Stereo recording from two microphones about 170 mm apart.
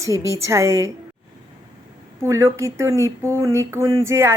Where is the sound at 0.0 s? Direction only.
20° right (ahead or behind).